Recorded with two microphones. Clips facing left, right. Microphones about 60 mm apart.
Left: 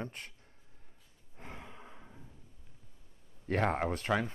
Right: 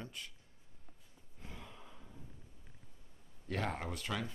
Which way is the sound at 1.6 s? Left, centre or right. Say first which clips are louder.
Left 3 dB; left.